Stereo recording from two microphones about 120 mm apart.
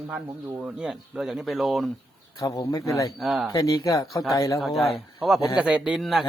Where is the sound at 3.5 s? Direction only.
30° left (ahead or behind).